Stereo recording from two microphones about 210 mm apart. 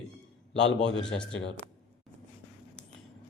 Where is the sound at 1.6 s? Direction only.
45° right (ahead or behind).